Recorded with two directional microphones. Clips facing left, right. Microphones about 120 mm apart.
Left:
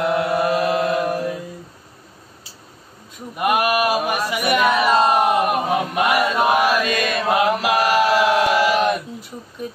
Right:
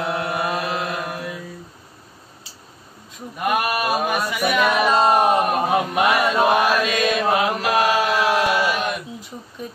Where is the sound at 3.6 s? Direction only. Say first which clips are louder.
Left 3 dB; 90° left.